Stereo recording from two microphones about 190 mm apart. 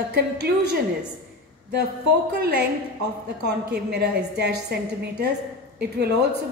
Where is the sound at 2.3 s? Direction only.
60° right (ahead or behind).